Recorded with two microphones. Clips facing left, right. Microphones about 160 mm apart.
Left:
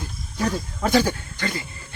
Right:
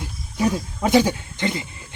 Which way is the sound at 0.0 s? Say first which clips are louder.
Right 4 dB; 10° right (ahead or behind).